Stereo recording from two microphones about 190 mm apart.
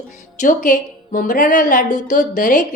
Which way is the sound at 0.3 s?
45° left (ahead or behind).